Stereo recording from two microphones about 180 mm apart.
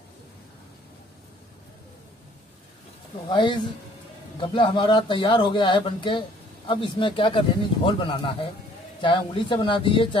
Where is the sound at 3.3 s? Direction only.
25° left (ahead or behind).